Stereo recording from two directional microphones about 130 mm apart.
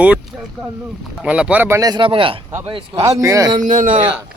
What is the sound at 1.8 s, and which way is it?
Speech, 30° right (ahead or behind).